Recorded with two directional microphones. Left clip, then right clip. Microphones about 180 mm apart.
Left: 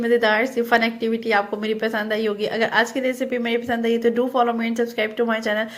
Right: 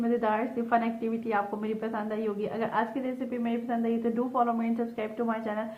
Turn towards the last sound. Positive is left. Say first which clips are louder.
# left 10 dB
turn(degrees=40)  # may be behind; listen again after turning